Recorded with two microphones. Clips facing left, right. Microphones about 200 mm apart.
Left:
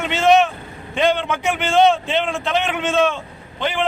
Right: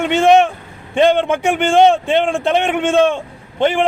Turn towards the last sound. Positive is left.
turn(degrees=-50)  # may be behind; listen again after turning